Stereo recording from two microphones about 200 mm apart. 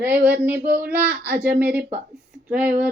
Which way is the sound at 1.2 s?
55° right (ahead or behind).